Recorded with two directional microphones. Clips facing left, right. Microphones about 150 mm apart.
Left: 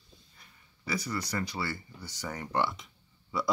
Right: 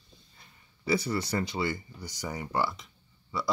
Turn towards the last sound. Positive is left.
turn(degrees=0)  # may be behind; listen again after turning